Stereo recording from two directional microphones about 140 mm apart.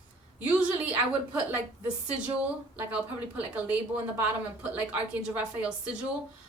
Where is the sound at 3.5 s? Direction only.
10° right (ahead or behind).